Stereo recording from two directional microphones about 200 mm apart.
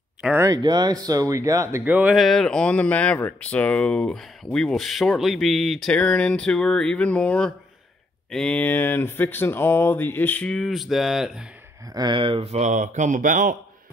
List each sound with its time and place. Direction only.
0.2 s speech: 10° right (ahead or behind)
11.9 s speech: 20° right (ahead or behind); by 13.6 s 40° right (ahead or behind)